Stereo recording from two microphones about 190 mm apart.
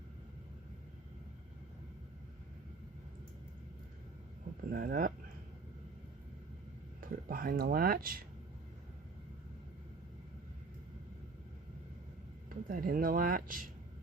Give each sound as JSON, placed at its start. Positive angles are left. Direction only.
{"t": 4.7, "sound": "speech", "side_deg": -50}
{"t": 7.0, "sound": "speech", "side_deg": -50}
{"t": 12.6, "sound": "speech", "side_deg": -50}